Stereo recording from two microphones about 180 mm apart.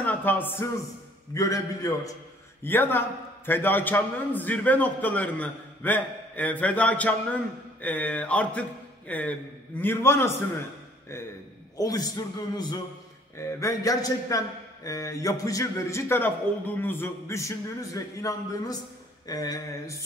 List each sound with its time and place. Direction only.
0.0 s a man's voice: 10° left (ahead or behind)
11.7 s a man's voice: 20° left (ahead or behind)